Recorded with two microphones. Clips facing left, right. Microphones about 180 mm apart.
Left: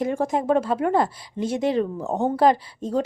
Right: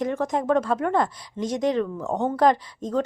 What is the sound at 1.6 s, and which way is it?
Speech, 30° left (ahead or behind).